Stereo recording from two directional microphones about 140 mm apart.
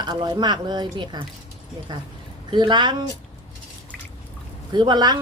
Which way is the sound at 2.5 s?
30° right (ahead or behind).